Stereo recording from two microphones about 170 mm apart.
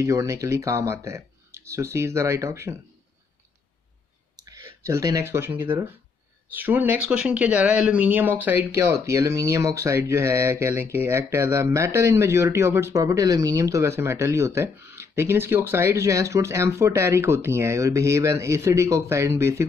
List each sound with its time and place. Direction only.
0.0 s speech: 20° right (ahead or behind)
4.4 s speech: 20° right (ahead or behind)